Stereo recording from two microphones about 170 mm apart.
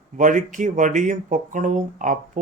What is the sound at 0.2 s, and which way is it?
Speech, 50° right (ahead or behind).